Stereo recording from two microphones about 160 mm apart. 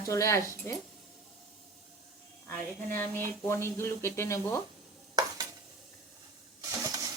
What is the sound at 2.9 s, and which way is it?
Speech, 10° left (ahead or behind).